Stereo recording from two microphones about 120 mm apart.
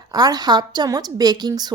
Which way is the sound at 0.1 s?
35° right (ahead or behind).